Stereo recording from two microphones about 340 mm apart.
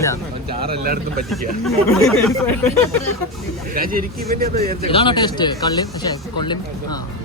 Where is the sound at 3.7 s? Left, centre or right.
Right.